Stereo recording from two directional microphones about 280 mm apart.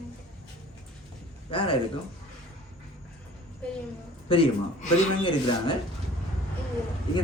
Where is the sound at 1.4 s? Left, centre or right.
Centre.